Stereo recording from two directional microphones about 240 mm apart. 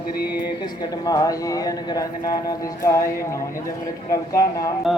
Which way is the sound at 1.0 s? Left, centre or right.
Centre.